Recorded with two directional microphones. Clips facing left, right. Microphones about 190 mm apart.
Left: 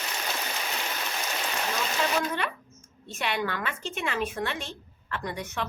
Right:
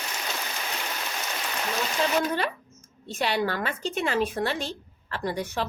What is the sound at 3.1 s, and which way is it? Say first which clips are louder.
A woman's voice: right 4 dB; 35° right (ahead or behind).